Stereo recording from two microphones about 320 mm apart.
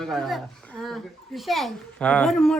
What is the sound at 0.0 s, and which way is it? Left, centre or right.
A child's voice, centre.